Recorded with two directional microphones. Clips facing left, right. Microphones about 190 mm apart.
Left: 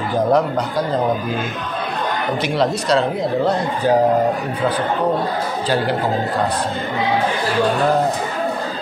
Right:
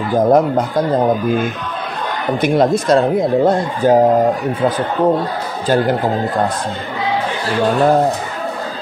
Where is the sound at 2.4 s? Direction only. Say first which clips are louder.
Right 8 dB; 50° right (ahead or behind).